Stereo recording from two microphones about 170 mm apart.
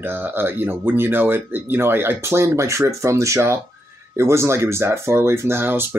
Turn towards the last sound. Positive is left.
turn(degrees=-10)  # may be behind; listen again after turning